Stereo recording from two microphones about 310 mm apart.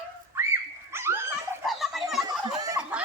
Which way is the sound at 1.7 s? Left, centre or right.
Centre.